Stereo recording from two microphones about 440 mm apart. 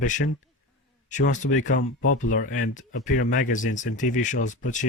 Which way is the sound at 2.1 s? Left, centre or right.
Centre.